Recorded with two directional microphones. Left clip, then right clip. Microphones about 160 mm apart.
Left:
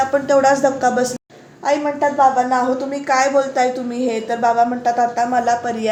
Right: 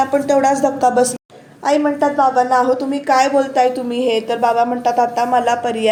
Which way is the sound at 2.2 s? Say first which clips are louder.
Right 1 dB; 45° right (ahead or behind).